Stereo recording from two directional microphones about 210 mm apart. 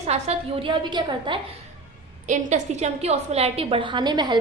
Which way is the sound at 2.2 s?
35° right (ahead or behind).